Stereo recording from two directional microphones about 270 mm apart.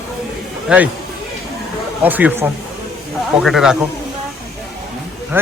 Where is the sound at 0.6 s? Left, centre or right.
Centre.